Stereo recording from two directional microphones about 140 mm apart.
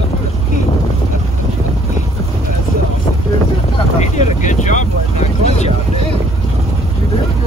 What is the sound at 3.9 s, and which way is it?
Boat, 55° left (ahead or behind).